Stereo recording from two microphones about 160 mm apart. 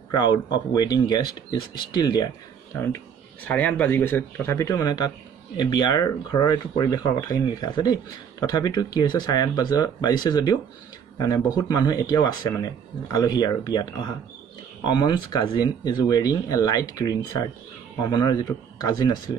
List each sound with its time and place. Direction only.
0.1 s speech: 25° left (ahead or behind)
3.4 s speech: 10° left (ahead or behind); by 19.3 s 25° left (ahead or behind)